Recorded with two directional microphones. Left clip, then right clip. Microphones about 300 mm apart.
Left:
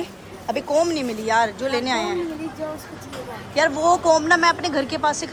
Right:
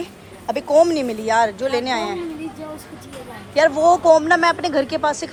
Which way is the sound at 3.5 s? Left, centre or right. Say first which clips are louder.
Right 4 dB; centre.